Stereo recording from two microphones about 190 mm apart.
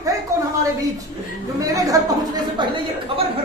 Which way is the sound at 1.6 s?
20° right (ahead or behind).